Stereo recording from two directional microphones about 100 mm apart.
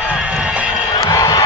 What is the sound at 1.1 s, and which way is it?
Crowd, 35° left (ahead or behind).